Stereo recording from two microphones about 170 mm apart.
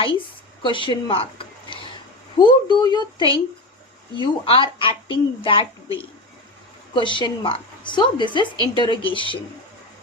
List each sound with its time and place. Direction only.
0.6 s a woman's voice: 30° left (ahead or behind)